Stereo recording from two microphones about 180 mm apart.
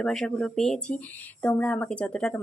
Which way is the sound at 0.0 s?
5° left (ahead or behind).